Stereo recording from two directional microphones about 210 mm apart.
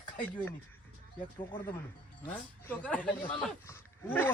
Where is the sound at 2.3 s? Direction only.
5° left (ahead or behind).